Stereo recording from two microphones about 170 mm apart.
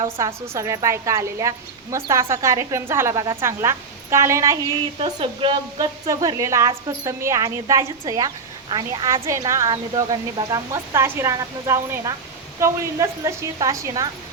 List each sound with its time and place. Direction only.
0.4 s a woman's voice: 15° right (ahead or behind)
4.9 s a woman's voice: 30° right (ahead or behind)